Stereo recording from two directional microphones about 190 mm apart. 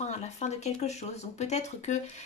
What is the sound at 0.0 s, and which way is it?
A woman's voice, 35° left (ahead or behind).